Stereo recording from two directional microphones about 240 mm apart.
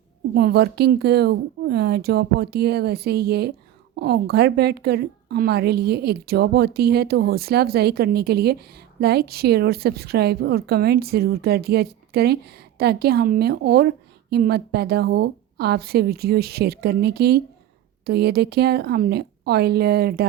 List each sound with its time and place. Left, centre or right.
0.3 s a woman's voice: right